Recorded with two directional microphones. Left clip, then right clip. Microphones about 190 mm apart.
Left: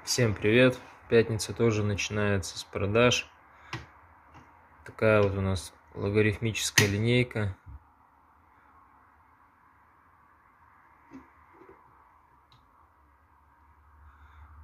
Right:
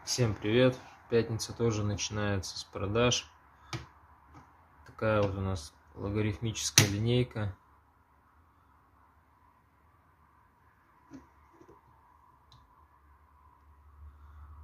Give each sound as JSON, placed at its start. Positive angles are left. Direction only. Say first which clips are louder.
{"t": 0.0, "sound": "speech", "louder": "left 6 dB", "side_deg": 20}
{"t": 4.8, "sound": "speech", "louder": "left 6 dB", "side_deg": 20}